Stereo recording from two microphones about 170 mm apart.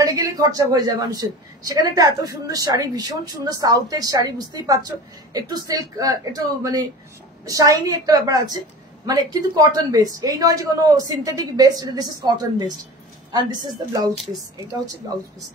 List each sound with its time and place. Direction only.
0.0 s a woman's voice: 20° right (ahead or behind)